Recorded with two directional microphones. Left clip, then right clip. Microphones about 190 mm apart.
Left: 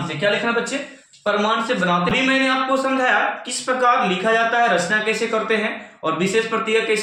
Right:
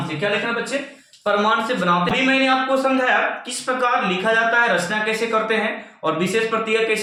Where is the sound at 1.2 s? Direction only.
5° right (ahead or behind).